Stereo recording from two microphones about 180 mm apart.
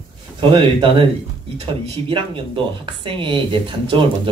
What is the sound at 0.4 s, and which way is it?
Speech, 25° right (ahead or behind).